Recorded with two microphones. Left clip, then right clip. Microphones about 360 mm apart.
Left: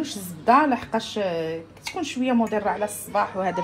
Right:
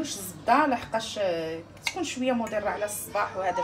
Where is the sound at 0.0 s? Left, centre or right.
Centre.